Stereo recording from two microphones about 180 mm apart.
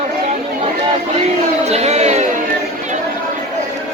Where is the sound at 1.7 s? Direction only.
35° right (ahead or behind).